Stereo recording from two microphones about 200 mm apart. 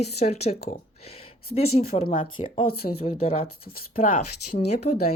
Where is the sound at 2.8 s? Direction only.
50° left (ahead or behind).